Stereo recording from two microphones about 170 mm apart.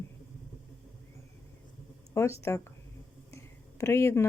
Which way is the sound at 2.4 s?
15° left (ahead or behind).